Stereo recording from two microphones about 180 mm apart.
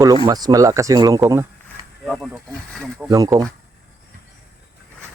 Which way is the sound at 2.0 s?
Centre (ahead or behind).